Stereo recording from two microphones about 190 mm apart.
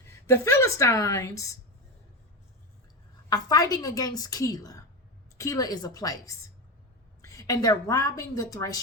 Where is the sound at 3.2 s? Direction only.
20° left (ahead or behind).